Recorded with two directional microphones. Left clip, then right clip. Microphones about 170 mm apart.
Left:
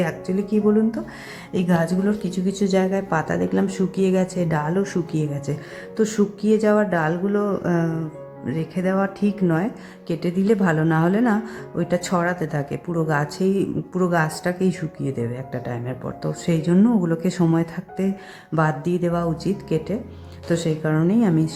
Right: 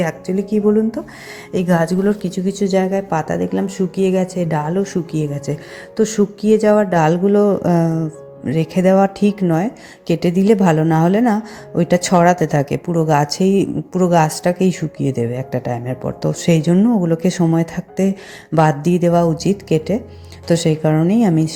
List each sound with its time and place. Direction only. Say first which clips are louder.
0.0 s speech: right 4 dB; 25° right (ahead or behind)
1.5 s speech: right 6 dB; 30° right (ahead or behind)
2.7 s a woman's voice: right 4 dB; 15° right (ahead or behind)
16.7 s a woman's voice: right 4 dB; 5° right (ahead or behind)
17.1 s speech: right 5 dB; 20° right (ahead or behind)